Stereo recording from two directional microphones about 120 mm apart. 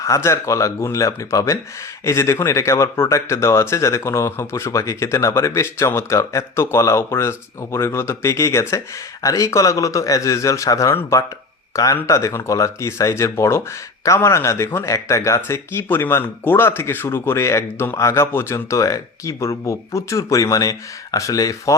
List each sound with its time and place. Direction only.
0.0 s speech: 25° left (ahead or behind)